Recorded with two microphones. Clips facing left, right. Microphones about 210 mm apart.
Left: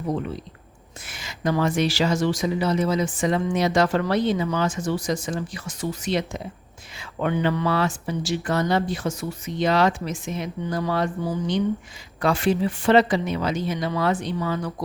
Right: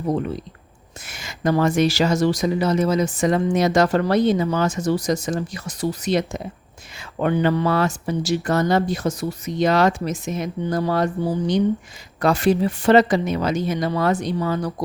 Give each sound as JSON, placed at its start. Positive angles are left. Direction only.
{"t": 1.0, "sound": "speech", "side_deg": -45}